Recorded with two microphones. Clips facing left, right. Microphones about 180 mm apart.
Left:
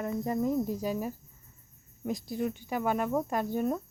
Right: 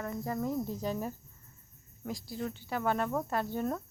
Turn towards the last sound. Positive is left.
turn(degrees=15)  # may be behind; listen again after turning